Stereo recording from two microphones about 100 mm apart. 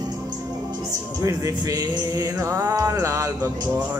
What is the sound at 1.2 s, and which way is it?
Music, 35° right (ahead or behind).